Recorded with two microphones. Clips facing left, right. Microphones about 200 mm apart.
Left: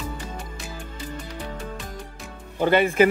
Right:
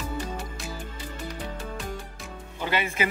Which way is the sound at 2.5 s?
50° left (ahead or behind).